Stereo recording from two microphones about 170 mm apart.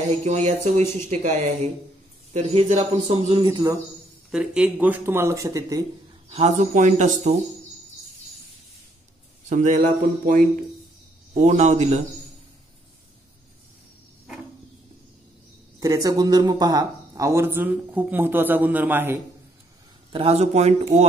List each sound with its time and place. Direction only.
0.2 s speech: 45° right (ahead or behind)
3.3 s a man's voice: 25° right (ahead or behind)
4.3 s speech: 5° right (ahead or behind); by 5.9 s 20° right (ahead or behind)
6.2 s speech: 40° right (ahead or behind)
9.5 s speech: 45° right (ahead or behind)
15.8 s speech: 20° right (ahead or behind)
20.1 s speech: 35° right (ahead or behind)